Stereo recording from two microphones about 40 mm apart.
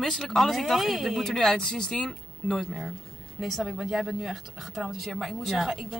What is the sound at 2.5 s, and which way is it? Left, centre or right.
A woman's voice, centre.